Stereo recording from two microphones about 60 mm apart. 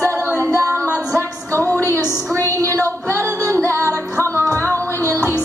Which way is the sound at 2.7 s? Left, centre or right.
Right.